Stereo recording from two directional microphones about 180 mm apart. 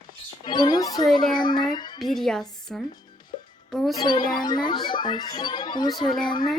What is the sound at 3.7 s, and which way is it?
Music, centre (ahead or behind).